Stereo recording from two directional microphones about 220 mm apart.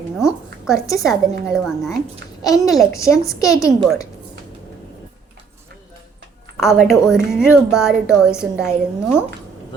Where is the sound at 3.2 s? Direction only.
15° left (ahead or behind).